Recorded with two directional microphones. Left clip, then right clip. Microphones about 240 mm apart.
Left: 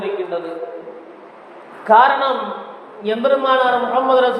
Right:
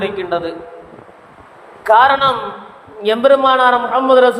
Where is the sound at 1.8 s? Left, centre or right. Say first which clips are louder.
Right 2 dB; right.